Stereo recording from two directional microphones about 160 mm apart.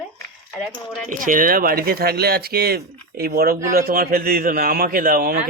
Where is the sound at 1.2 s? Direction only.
60° right (ahead or behind).